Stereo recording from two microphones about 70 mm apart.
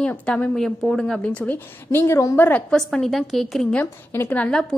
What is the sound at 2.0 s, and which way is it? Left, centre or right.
Speech, left.